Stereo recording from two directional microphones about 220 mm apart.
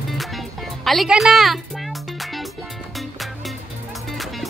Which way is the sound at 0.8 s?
Centre (ahead or behind).